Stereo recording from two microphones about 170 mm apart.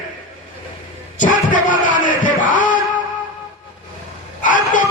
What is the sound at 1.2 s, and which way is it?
A man's voice, 50° left (ahead or behind).